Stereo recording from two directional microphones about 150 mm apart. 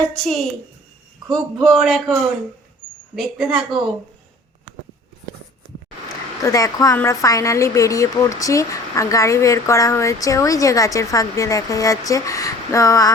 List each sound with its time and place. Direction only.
0.0 s a man's voice: 5° left (ahead or behind)
1.5 s a man's voice: centre (ahead or behind)
3.2 s a man's voice: 5° right (ahead or behind)
6.4 s speech: 25° left (ahead or behind)